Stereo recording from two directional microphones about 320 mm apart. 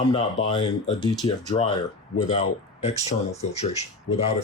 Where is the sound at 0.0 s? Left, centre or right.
Centre.